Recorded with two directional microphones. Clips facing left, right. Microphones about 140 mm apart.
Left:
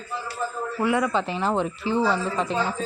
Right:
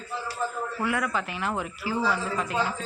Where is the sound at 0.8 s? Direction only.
25° left (ahead or behind).